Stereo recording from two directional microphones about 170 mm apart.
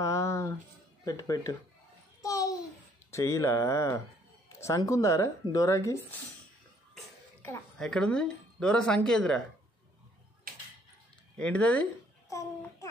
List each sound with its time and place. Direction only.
0.0 s a sound: 15° left (ahead or behind)
1.0 s speech: 20° left (ahead or behind)
2.2 s babbling: 20° left (ahead or behind)
3.1 s speech: 15° left (ahead or behind)
7.4 s a woman's voice: 5° left (ahead or behind)
10.5 s a sound: 60° right (ahead or behind)
11.3 s speech: 5° left (ahead or behind)